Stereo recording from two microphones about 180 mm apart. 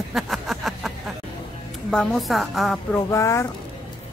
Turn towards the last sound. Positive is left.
turn(degrees=15)  # may be behind; listen again after turning